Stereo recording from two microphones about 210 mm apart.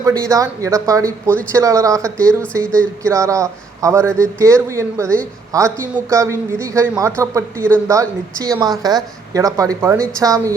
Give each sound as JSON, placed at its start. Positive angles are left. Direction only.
{"t": 0.0, "sound": "speech", "side_deg": -15}